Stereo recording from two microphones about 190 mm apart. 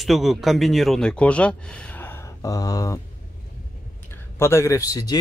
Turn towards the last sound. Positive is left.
turn(degrees=20)  # may be behind; listen again after turning